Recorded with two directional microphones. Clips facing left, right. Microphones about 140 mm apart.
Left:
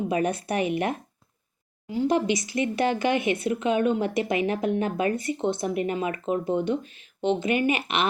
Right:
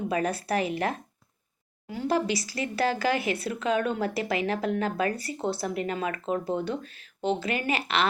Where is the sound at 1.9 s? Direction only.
20° left (ahead or behind).